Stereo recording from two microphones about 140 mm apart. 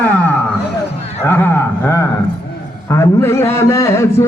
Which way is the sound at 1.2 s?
15° left (ahead or behind).